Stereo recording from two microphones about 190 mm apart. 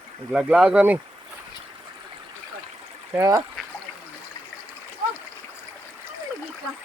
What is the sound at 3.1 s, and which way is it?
Speech, 15° right (ahead or behind).